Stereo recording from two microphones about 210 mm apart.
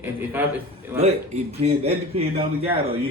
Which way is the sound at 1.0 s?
30° right (ahead or behind).